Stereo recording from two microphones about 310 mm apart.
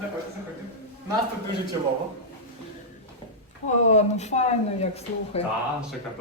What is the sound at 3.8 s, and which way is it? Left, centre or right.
Speech, left.